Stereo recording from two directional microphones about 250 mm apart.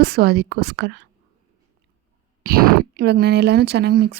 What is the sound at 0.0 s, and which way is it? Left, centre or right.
A woman's voice, right.